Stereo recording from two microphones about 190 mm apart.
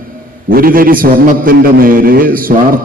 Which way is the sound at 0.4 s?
50° right (ahead or behind).